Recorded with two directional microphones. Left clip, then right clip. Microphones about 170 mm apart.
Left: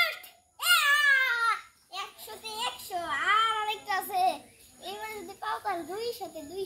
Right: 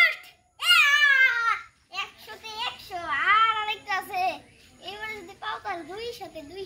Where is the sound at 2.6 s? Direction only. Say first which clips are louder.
Right 1 dB; 20° left (ahead or behind).